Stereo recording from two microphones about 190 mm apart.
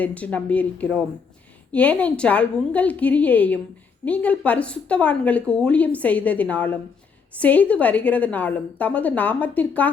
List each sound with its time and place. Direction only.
0.0 s a woman's voice: 5° left (ahead or behind)